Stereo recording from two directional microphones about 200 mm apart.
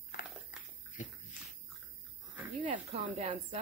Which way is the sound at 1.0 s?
40° left (ahead or behind).